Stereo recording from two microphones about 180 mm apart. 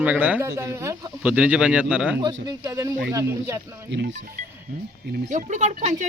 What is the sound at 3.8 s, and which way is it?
Speech, 75° right (ahead or behind).